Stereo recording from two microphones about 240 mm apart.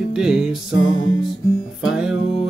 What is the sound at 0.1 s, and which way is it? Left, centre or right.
Music, centre.